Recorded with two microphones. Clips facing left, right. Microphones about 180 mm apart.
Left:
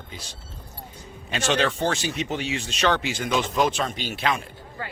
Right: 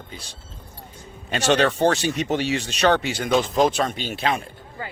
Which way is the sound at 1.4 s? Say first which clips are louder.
Right 5 dB; 70° right (ahead or behind).